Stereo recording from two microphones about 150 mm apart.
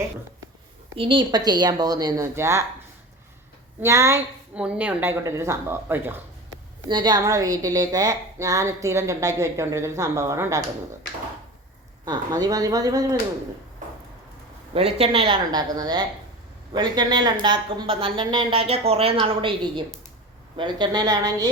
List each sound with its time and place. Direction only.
0.9 s a woman's voice: 35° right (ahead or behind); by 2.6 s 20° right (ahead or behind)
3.8 s speech: 20° right (ahead or behind)
4.5 s speech: 10° right (ahead or behind)
6.8 s a woman's voice: 30° right (ahead or behind)
12.0 s a woman's voice: 25° right (ahead or behind)
14.7 s a woman's voice: 45° right (ahead or behind); by 21.5 s 25° right (ahead or behind)